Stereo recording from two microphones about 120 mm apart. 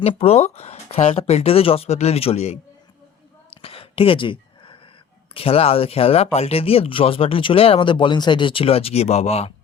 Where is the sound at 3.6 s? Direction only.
50° left (ahead or behind).